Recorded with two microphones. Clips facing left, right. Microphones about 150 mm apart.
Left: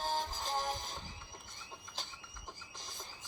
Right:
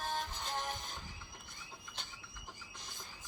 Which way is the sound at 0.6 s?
Centre (ahead or behind).